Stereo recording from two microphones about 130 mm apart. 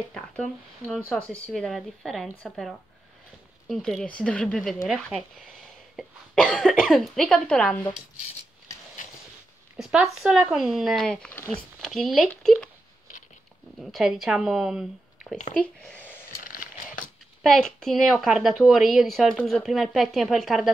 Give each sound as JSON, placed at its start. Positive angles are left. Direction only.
{"t": 0.1, "sound": "a woman's voice", "side_deg": 5}
{"t": 6.3, "sound": "a woman's voice", "side_deg": 5}
{"t": 9.8, "sound": "a woman's voice", "side_deg": -5}
{"t": 13.7, "sound": "speech", "side_deg": 0}
{"t": 15.6, "sound": "speech", "side_deg": 10}
{"t": 16.4, "sound": "biting", "side_deg": 90}
{"t": 17.4, "sound": "a woman's voice", "side_deg": 5}